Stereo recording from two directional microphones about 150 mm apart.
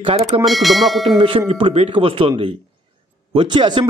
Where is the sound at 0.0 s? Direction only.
45° right (ahead or behind).